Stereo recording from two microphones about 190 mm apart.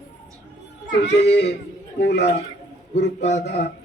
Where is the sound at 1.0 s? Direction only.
65° left (ahead or behind).